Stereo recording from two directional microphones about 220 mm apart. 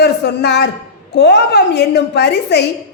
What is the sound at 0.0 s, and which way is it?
A woman's voice, 50° left (ahead or behind).